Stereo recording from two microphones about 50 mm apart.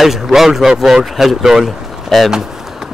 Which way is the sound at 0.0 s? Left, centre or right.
Centre.